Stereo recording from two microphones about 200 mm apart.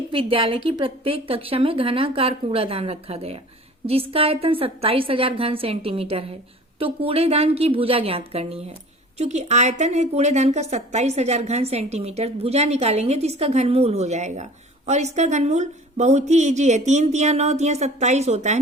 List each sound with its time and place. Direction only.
0.1 s a woman's voice: 25° right (ahead or behind)